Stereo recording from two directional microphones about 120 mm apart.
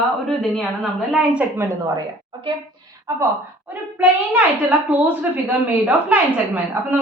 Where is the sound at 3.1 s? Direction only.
30° right (ahead or behind).